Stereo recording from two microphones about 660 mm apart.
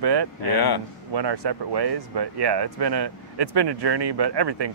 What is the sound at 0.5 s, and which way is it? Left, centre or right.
Speech, left.